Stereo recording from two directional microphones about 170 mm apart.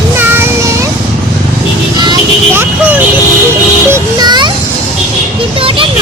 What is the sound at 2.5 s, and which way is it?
Speech, 10° right (ahead or behind).